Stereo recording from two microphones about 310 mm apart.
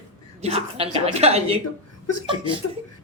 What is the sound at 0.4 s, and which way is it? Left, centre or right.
A woman's voice, centre.